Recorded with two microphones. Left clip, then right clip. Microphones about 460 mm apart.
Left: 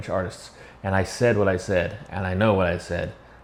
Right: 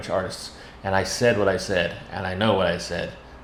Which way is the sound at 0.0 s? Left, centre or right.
Left.